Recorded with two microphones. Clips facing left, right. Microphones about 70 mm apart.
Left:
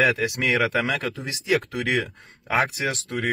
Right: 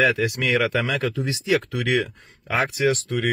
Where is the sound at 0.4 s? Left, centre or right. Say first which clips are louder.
Right 1 dB; left.